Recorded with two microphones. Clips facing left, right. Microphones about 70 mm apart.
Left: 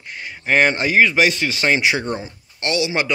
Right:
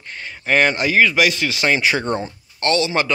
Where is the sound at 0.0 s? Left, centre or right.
Centre.